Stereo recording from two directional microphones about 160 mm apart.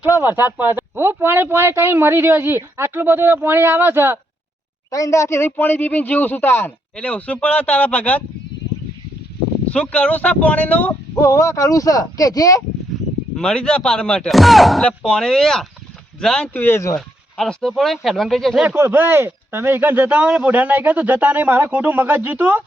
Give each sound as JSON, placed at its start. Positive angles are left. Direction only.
{"t": 0.2, "sound": "speech", "side_deg": -15}
{"t": 4.9, "sound": "a man's voice", "side_deg": 20}
{"t": 9.6, "sound": "a man's voice", "side_deg": 5}
{"t": 11.1, "sound": "speech", "side_deg": 20}
{"t": 13.3, "sound": "a man's voice", "side_deg": 5}
{"t": 17.3, "sound": "speech", "side_deg": 5}
{"t": 18.6, "sound": "speech", "side_deg": -15}